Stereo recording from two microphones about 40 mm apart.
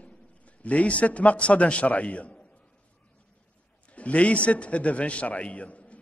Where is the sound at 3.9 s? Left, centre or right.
Left.